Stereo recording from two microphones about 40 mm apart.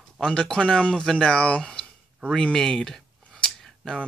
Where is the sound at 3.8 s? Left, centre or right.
Centre.